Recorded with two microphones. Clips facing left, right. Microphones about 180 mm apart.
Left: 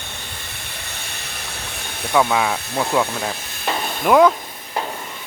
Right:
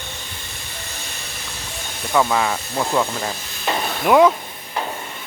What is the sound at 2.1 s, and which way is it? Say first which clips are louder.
Speech: left 1 dB; centre (ahead or behind).